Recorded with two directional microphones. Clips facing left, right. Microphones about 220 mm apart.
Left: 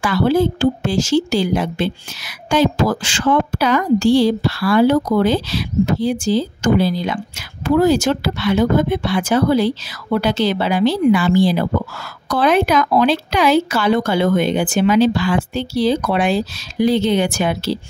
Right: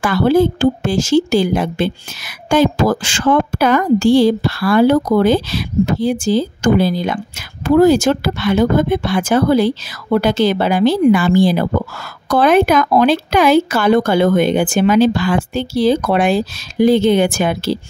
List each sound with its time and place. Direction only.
0.0 s a woman's voice: 50° right (ahead or behind)